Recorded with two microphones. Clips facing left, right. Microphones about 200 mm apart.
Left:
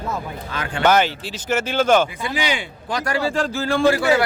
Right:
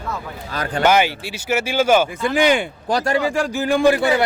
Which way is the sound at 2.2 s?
50° right (ahead or behind).